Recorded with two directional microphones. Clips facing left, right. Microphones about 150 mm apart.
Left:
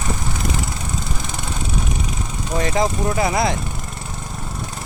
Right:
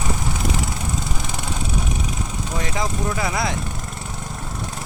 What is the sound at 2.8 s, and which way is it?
Speech, 35° left (ahead or behind).